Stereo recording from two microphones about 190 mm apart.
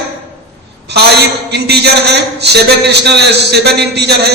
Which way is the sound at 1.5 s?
60° right (ahead or behind).